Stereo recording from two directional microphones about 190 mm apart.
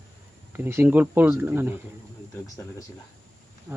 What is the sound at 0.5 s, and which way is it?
Speech, 10° right (ahead or behind).